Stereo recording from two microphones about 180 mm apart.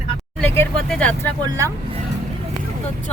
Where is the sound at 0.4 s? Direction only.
10° left (ahead or behind).